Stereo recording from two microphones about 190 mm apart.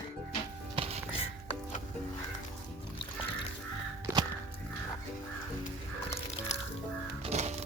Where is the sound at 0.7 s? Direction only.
30° right (ahead or behind).